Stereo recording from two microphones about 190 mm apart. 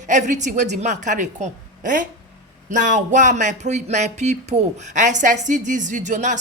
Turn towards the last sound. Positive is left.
turn(degrees=-40)  # may be behind; listen again after turning